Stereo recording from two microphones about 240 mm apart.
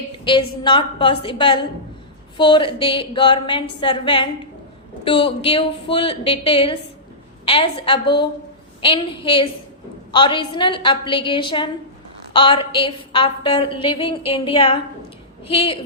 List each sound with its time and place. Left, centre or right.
0.3 s a woman's voice: centre